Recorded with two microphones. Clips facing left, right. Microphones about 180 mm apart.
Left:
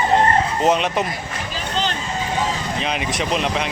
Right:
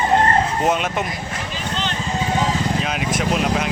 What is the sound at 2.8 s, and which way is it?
Speech, centre (ahead or behind).